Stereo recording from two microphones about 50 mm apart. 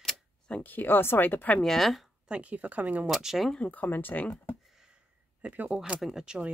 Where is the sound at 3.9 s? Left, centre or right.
Left.